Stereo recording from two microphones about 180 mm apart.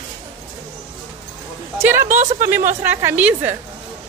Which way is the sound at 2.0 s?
45° right (ahead or behind).